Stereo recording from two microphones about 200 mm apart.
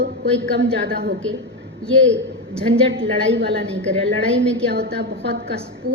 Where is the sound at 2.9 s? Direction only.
65° right (ahead or behind).